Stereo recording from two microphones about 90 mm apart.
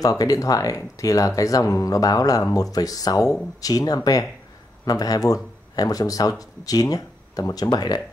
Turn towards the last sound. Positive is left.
turn(degrees=50)  # may be behind; listen again after turning